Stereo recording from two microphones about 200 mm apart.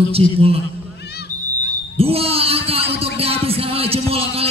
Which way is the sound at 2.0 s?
30° right (ahead or behind).